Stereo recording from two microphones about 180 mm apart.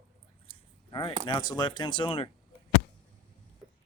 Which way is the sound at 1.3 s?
25° left (ahead or behind).